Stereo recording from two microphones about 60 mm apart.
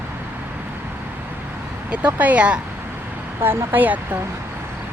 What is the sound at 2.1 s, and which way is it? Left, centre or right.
Speech, right.